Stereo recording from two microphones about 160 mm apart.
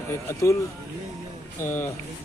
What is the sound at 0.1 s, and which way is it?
Speech, 15° left (ahead or behind).